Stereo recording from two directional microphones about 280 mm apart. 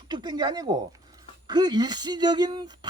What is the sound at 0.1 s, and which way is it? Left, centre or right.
Speech, centre.